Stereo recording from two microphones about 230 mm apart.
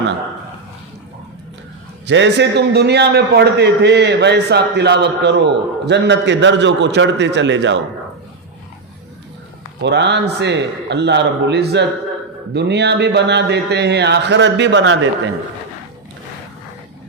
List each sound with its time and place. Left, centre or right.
2.0 s a man's voice: right
9.8 s a man's voice: right